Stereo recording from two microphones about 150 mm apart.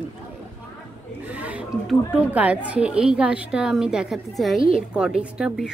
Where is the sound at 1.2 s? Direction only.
10° right (ahead or behind).